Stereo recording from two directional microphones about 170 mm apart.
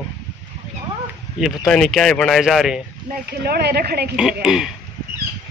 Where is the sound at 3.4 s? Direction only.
70° right (ahead or behind).